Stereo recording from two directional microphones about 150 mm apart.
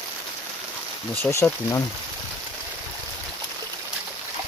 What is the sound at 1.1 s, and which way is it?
Speech, 15° left (ahead or behind).